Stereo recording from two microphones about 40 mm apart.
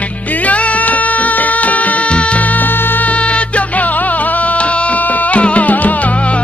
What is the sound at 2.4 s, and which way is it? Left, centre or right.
Music, left.